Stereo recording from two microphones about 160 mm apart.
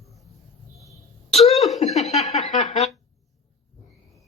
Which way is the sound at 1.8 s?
45° left (ahead or behind).